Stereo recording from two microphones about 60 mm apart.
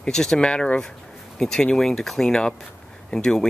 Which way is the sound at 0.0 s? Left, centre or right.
Centre.